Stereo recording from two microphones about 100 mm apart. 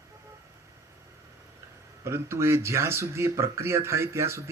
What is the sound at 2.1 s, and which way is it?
Speech, 25° right (ahead or behind).